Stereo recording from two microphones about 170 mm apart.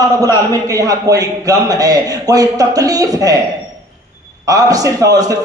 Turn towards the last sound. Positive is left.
turn(degrees=-20)  # may be behind; listen again after turning